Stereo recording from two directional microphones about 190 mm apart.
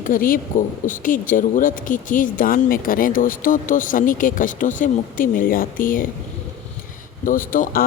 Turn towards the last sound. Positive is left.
turn(degrees=50)  # may be behind; listen again after turning